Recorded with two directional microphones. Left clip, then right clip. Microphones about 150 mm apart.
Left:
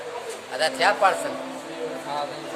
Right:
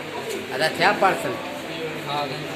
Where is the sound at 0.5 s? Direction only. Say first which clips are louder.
Right 1 dB; 5° left (ahead or behind).